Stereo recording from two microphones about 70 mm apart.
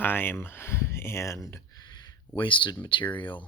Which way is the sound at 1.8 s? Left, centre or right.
Left.